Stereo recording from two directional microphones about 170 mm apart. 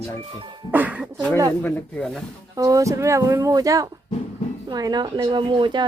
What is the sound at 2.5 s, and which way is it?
Speech, 20° right (ahead or behind).